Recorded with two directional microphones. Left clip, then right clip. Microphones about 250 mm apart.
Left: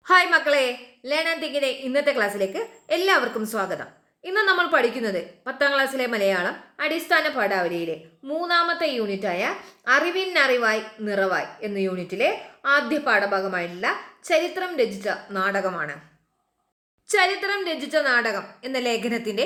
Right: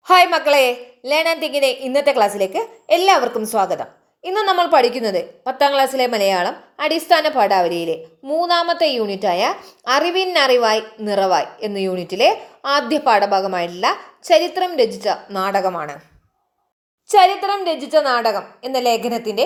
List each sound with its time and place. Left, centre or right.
0.1 s a woman's voice: centre
17.1 s a woman's voice: centre